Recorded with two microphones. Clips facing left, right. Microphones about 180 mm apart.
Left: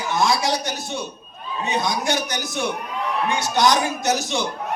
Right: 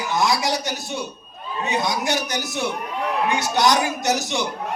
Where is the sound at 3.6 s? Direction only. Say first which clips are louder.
Left 1 dB; 20° right (ahead or behind).